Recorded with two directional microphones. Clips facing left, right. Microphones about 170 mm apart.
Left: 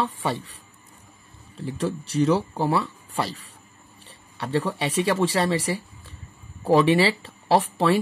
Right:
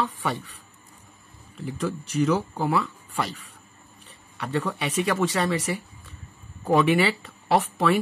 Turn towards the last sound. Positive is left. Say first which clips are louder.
# left 2 dB
turn(degrees=30)  # may be behind; listen again after turning